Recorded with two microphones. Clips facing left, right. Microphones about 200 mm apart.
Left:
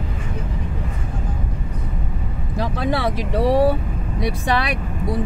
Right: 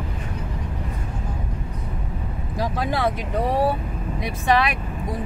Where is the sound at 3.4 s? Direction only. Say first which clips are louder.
Left 5 dB; 80° left.